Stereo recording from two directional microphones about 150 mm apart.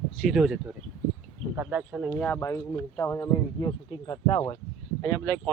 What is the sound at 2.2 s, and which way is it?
Speech, 10° left (ahead or behind).